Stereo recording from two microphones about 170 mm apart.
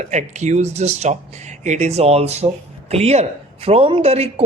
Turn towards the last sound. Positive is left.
turn(degrees=-35)  # may be behind; listen again after turning